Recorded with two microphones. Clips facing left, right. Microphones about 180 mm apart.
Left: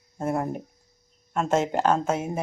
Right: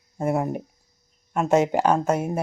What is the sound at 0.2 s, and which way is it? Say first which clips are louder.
A woman's voice: right 3 dB; 5° right (ahead or behind).